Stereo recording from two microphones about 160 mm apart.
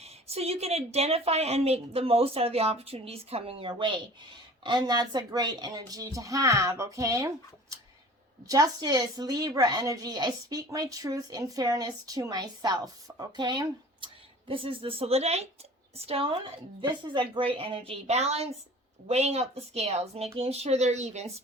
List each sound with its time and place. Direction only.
0.0 s a woman's voice: 40° right (ahead or behind); by 7.3 s 20° right (ahead or behind)
8.4 s a woman's voice: 20° right (ahead or behind); by 21.4 s 40° right (ahead or behind)